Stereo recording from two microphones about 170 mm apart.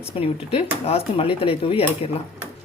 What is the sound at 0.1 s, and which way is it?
Speech, 35° left (ahead or behind).